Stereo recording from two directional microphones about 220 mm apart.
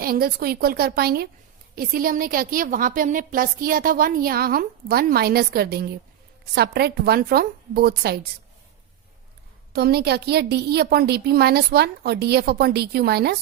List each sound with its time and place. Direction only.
0.0 s a woman's voice: 45° right (ahead or behind)
9.7 s a woman's voice: 45° right (ahead or behind)